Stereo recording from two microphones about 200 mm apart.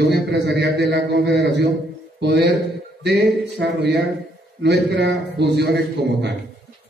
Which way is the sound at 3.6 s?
55° right (ahead or behind).